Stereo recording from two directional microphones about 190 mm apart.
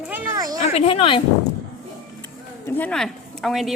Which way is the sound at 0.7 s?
30° left (ahead or behind).